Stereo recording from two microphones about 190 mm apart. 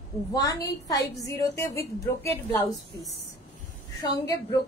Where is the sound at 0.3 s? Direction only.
20° left (ahead or behind).